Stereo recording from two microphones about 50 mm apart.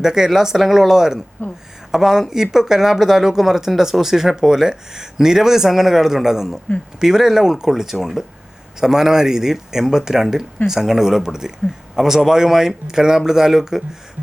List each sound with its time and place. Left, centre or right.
0.0 s speech: centre
1.4 s speech: left
1.9 s speech: centre